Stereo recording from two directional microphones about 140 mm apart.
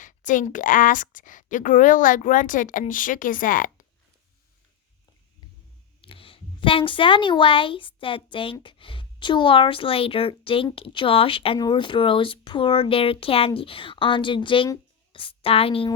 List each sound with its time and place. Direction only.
0.0 s speech: 65° left (ahead or behind)
6.0 s a woman's voice: 40° left (ahead or behind)